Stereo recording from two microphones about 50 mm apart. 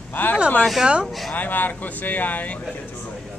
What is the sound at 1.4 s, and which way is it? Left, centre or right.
Speech, left.